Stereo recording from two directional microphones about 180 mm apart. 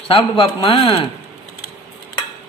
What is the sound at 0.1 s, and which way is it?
Speech, 30° left (ahead or behind).